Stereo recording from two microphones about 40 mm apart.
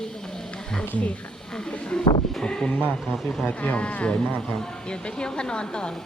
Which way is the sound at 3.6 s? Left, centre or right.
Left.